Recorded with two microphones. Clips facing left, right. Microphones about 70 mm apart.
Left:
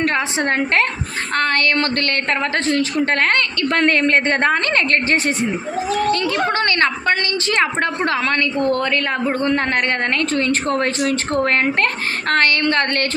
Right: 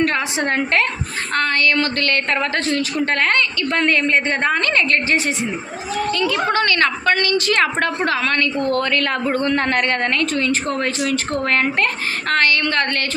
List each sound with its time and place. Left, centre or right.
0.0 s a woman's voice: left
4.5 s a woman's voice: left
8.0 s a woman's voice: left
10.3 s a woman's voice: left